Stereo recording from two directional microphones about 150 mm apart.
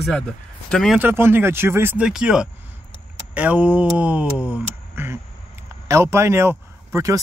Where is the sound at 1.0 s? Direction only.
15° right (ahead or behind).